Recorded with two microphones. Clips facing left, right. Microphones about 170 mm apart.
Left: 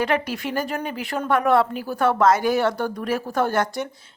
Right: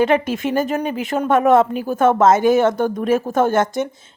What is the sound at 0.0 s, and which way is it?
A woman's voice, 20° right (ahead or behind).